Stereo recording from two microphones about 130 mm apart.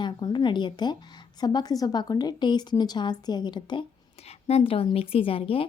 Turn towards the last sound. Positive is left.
turn(degrees=45)  # may be behind; listen again after turning